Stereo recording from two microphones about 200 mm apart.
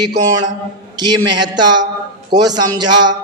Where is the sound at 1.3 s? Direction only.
20° right (ahead or behind).